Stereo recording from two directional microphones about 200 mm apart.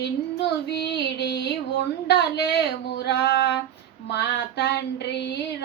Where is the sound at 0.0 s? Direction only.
55° left (ahead or behind).